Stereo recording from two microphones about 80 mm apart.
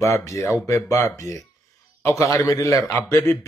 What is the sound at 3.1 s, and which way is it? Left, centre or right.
Speech, left.